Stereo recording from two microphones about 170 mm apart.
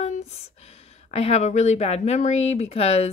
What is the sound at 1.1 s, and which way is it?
Speech, 40° left (ahead or behind).